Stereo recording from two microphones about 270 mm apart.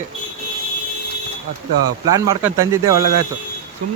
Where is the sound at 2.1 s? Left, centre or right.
Centre.